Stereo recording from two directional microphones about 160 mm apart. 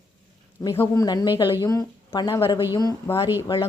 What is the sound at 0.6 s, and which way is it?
Speech, 20° left (ahead or behind).